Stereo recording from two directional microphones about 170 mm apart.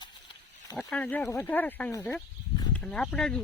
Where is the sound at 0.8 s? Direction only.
5° left (ahead or behind).